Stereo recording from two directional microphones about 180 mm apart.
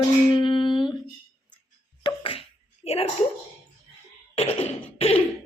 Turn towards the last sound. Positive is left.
turn(degrees=30)  # may be behind; listen again after turning